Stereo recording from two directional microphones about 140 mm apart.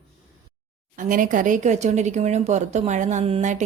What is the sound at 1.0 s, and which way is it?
Speech, 75° right (ahead or behind).